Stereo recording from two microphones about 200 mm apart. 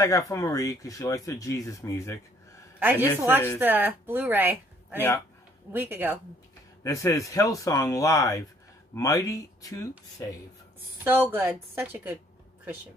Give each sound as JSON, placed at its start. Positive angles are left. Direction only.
{"t": 0.0, "sound": "speech", "side_deg": 15}
{"t": 2.8, "sound": "speech", "side_deg": -10}
{"t": 6.8, "sound": "speech", "side_deg": 15}
{"t": 11.1, "sound": "speech", "side_deg": -10}